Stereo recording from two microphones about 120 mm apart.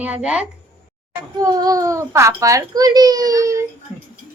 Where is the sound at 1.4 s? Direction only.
30° right (ahead or behind).